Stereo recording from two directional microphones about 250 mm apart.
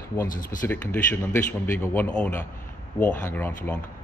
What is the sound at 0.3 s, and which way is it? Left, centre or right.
Speech, left.